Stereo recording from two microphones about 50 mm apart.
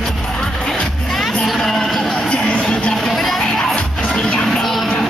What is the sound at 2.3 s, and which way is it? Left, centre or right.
Music, centre.